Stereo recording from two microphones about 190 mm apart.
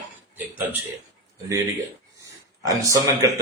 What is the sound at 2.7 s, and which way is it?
Speech, 20° right (ahead or behind).